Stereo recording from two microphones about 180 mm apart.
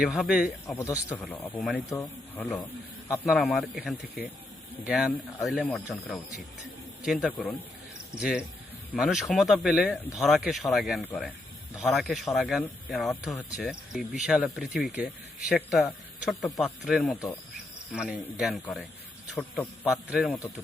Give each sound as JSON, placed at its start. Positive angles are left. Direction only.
{"t": 0.0, "sound": "speech", "side_deg": 0}
{"t": 0.8, "sound": "speech", "side_deg": 20}
{"t": 1.2, "sound": "a man's voice", "side_deg": 5}